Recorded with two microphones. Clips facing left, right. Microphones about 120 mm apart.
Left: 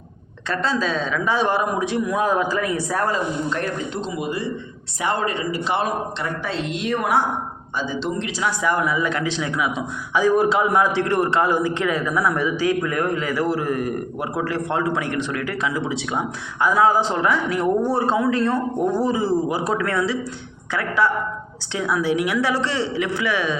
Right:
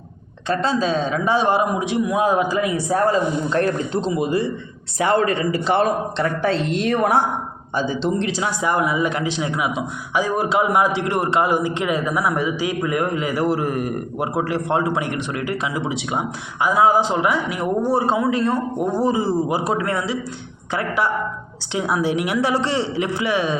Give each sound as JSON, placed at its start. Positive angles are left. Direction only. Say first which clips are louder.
{"t": 0.4, "sound": "speech", "louder": "right 3 dB", "side_deg": -20}
{"t": 4.0, "sound": "a man's voice", "louder": "right 8 dB", "side_deg": -35}
{"t": 5.6, "sound": "a man's voice", "louder": "right 5 dB", "side_deg": -40}
{"t": 8.0, "sound": "speech", "louder": "right 3 dB", "side_deg": -25}
{"t": 10.2, "sound": "a man's voice", "louder": "left 4 dB", "side_deg": -5}